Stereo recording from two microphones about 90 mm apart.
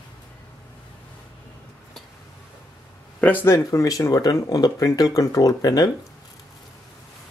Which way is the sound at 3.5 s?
40° left (ahead or behind).